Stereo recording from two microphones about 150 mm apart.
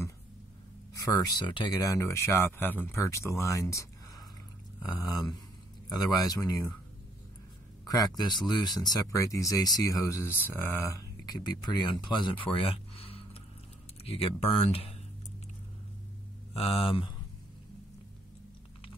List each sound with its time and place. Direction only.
0.9 s speech: 25° left (ahead or behind)
7.8 s speech: 25° left (ahead or behind); by 14.9 s 40° left (ahead or behind)
16.5 s speech: 40° left (ahead or behind)